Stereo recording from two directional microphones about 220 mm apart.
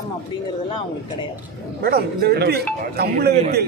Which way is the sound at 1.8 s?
45° right (ahead or behind).